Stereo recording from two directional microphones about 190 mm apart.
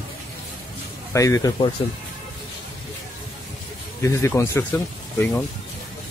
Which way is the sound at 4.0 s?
15° left (ahead or behind).